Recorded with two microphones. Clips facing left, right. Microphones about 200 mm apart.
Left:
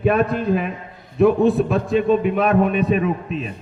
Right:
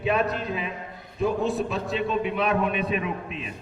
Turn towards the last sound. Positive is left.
turn(degrees=40)  # may be behind; listen again after turning